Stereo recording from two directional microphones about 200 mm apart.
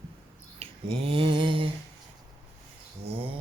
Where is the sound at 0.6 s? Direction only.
30° right (ahead or behind).